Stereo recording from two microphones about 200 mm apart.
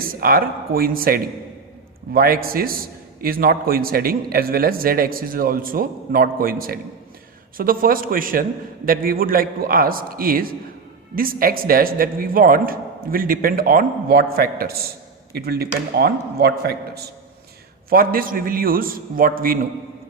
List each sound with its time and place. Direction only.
0.0 s a man's voice: 45° right (ahead or behind)